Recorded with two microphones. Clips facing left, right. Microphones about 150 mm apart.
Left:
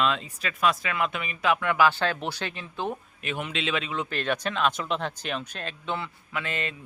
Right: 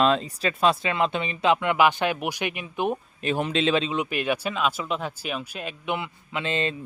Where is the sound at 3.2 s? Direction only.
35° right (ahead or behind).